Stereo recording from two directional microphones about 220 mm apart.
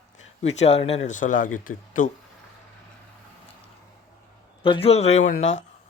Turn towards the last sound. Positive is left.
turn(degrees=60)  # may be behind; listen again after turning